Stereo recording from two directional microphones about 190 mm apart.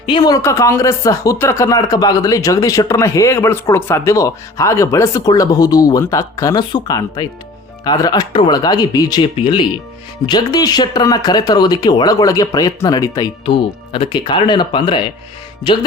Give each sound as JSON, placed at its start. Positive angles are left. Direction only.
{"t": 0.0, "sound": "speech", "side_deg": 25}